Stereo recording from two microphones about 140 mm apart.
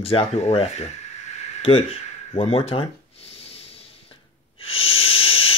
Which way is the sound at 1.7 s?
40° left (ahead or behind).